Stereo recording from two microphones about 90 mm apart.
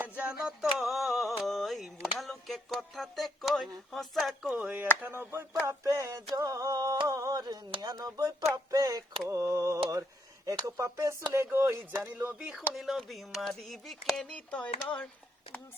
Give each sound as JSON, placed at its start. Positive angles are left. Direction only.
{"t": 0.0, "sound": "a sound", "side_deg": -10}
{"t": 4.5, "sound": "speech", "side_deg": -15}
{"t": 5.6, "sound": "mantra", "side_deg": -35}
{"t": 6.3, "sound": "a sound", "side_deg": -35}
{"t": 7.8, "sound": "speech", "side_deg": -45}
{"t": 8.4, "sound": "a sound", "side_deg": -45}
{"t": 9.2, "sound": "mantra", "side_deg": -35}
{"t": 11.5, "sound": "speech", "side_deg": -25}
{"t": 12.4, "sound": "speech", "side_deg": -10}